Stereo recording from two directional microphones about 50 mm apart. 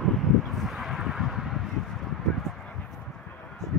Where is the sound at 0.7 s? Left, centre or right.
Centre.